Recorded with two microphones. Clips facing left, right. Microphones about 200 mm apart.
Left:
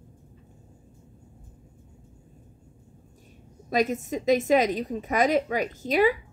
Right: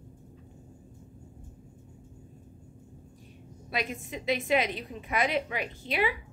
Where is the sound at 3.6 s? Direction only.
40° left (ahead or behind).